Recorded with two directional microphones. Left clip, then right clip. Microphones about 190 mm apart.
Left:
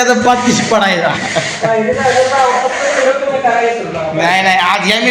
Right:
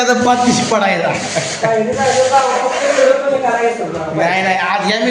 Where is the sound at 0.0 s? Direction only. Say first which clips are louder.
Left 2 dB; centre (ahead or behind).